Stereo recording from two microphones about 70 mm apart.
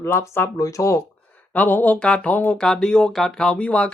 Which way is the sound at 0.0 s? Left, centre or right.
Left.